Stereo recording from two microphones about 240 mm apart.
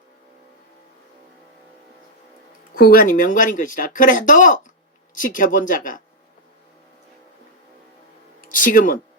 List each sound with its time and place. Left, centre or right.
2.7 s speech: left
8.4 s speech: left